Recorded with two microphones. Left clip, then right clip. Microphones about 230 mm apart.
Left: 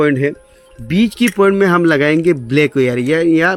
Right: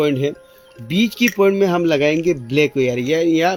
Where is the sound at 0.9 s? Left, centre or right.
Left.